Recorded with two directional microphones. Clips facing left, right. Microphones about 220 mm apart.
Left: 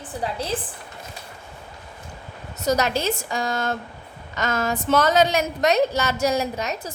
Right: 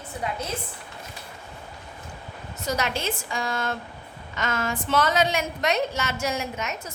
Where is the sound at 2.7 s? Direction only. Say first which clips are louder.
Left 6 dB; 40° left (ahead or behind).